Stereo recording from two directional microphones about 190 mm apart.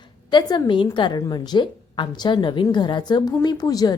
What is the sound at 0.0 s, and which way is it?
Speech, 25° left (ahead or behind).